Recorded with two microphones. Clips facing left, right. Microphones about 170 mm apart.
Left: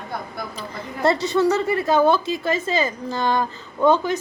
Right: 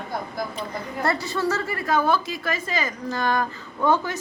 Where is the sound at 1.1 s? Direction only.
20° left (ahead or behind).